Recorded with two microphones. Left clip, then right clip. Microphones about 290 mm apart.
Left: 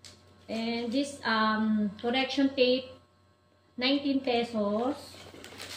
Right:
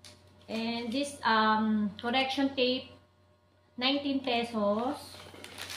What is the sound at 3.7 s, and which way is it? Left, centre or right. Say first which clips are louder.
Speech: left 2 dB; centre.